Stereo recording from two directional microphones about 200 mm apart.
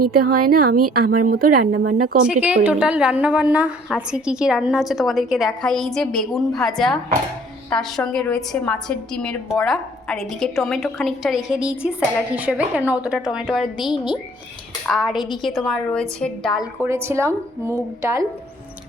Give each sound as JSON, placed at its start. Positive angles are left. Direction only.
{"t": 0.1, "sound": "speech", "side_deg": -50}
{"t": 1.8, "sound": "a woman's voice", "side_deg": -90}
{"t": 2.2, "sound": "a woman's voice", "side_deg": -5}
{"t": 13.7, "sound": "a woman's voice", "side_deg": 25}
{"t": 14.8, "sound": "a woman's voice", "side_deg": 0}
{"t": 16.8, "sound": "speech", "side_deg": -15}